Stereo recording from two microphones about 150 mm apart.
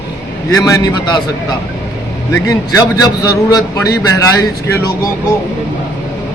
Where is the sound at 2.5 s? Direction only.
25° left (ahead or behind).